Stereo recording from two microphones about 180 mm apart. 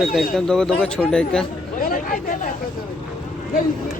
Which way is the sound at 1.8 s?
50° left (ahead or behind).